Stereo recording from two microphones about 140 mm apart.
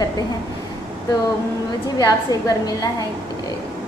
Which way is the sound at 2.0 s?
25° left (ahead or behind).